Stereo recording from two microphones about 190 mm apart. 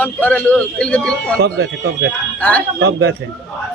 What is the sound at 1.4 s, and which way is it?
Speech, 65° right (ahead or behind).